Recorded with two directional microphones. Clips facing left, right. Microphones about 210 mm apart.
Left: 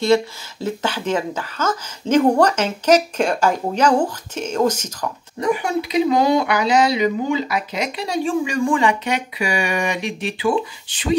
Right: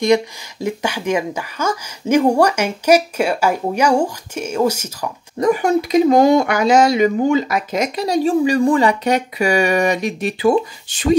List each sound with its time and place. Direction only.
0.0 s speech: 15° right (ahead or behind)
5.4 s speech: 45° right (ahead or behind)